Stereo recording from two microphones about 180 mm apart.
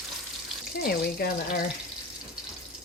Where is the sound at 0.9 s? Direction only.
55° left (ahead or behind).